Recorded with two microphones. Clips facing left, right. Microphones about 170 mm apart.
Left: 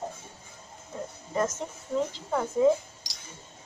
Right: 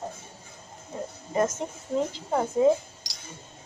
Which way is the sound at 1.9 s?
30° right (ahead or behind).